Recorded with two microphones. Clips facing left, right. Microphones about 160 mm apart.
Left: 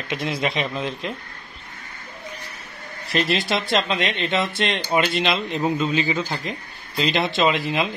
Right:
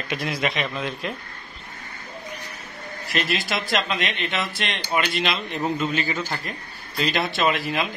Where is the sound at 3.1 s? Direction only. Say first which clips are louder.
Left 4 dB; 30° left (ahead or behind).